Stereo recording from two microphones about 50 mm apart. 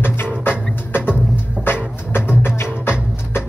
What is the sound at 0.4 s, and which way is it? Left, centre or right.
Music, left.